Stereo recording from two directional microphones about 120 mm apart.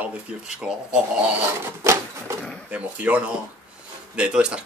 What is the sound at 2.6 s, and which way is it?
Speech, 10° right (ahead or behind).